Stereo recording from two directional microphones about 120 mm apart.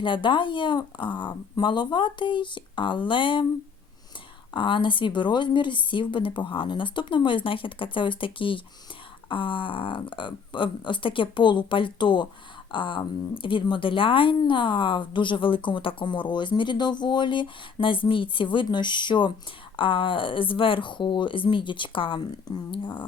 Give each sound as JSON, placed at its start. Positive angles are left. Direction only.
{"t": 0.0, "sound": "speech", "side_deg": 40}
{"t": 4.5, "sound": "a woman's voice", "side_deg": 45}